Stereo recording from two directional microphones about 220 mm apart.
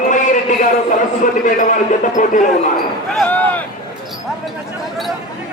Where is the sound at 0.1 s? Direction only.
35° left (ahead or behind).